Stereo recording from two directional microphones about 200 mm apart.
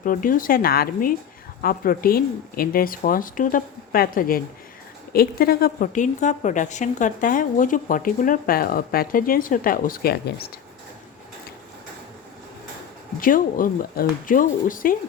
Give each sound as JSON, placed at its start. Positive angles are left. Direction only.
{"t": 0.0, "sound": "a woman's voice", "side_deg": 45}
{"t": 13.1, "sound": "a woman's voice", "side_deg": 45}